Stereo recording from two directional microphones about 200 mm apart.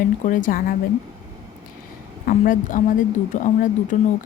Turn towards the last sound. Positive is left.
turn(degrees=40)  # may be behind; listen again after turning